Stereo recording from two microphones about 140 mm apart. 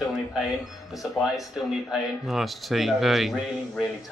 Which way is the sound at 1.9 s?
Centre (ahead or behind).